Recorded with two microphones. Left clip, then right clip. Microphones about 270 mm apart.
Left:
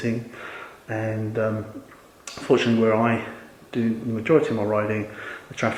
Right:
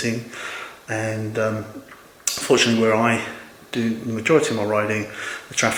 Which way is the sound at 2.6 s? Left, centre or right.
Centre.